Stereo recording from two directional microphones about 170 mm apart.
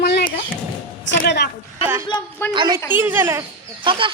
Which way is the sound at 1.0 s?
80° left.